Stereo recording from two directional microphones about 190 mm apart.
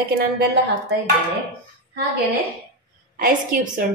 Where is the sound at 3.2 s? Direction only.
50° right (ahead or behind).